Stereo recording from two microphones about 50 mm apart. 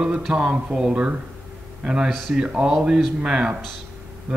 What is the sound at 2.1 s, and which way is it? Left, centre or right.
Speech, centre.